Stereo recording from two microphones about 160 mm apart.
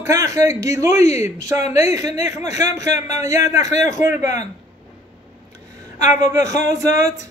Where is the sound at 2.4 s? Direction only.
45° left (ahead or behind).